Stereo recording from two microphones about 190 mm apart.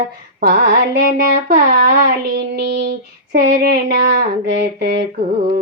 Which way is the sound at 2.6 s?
60° right (ahead or behind).